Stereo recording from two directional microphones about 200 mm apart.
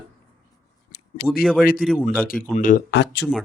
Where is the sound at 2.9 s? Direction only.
60° left (ahead or behind).